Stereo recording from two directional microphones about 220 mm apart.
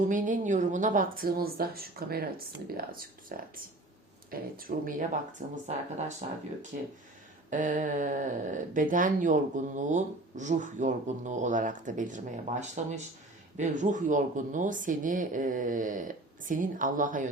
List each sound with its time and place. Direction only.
0.1 s speech: 35° right (ahead or behind)
7.5 s speech: 35° right (ahead or behind)